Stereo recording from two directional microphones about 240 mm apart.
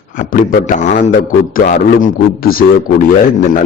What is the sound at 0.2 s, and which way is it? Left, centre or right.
Mantra, left.